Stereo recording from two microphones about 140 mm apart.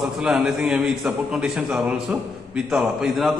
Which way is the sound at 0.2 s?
5° right (ahead or behind).